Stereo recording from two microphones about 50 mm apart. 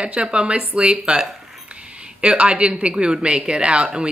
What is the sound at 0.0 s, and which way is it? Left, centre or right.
A woman's voice, right.